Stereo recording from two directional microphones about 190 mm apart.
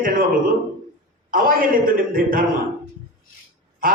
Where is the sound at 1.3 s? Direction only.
45° right (ahead or behind).